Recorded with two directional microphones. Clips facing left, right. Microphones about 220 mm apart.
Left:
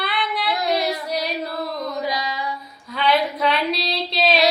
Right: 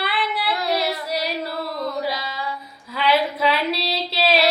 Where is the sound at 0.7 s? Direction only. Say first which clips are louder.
Left 2 dB; 5° right (ahead or behind).